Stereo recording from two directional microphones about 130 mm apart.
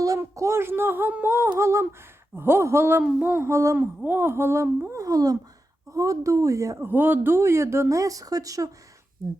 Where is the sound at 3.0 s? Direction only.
10° right (ahead or behind).